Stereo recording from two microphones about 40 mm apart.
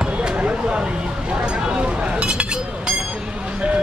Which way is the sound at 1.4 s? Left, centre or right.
Right.